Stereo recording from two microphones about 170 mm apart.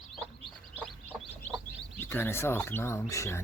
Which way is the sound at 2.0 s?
10° left (ahead or behind).